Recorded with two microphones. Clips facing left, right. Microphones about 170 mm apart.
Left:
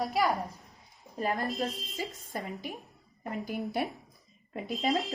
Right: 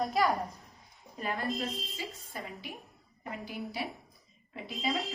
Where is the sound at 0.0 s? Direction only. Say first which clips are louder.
Even; centre (ahead or behind).